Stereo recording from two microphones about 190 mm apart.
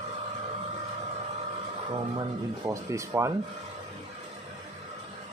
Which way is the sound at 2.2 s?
20° right (ahead or behind).